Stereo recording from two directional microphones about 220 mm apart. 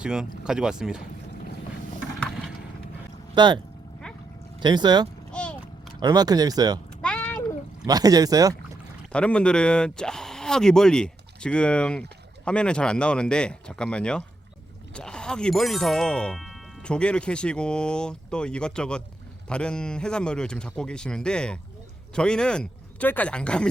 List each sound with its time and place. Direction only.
0.0 s speech: 5° right (ahead or behind)
3.3 s speech: 20° right (ahead or behind)
4.6 s speech: 20° right (ahead or behind)
5.3 s a sound: 5° left (ahead or behind)
6.0 s speech: 15° right (ahead or behind)
7.0 s a sound: 5° left (ahead or behind)
7.9 s speech: 15° right (ahead or behind)
9.1 s speech: 5° left (ahead or behind)